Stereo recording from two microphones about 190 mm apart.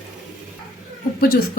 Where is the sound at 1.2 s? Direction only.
55° left (ahead or behind).